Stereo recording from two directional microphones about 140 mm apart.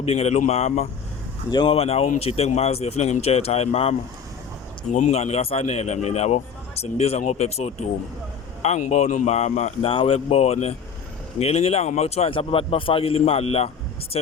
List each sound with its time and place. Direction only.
0.0 s speech: 50° left (ahead or behind)
1.5 s speech: 35° left (ahead or behind); by 9.9 s 55° left (ahead or behind)
9.9 s speech: 40° left (ahead or behind)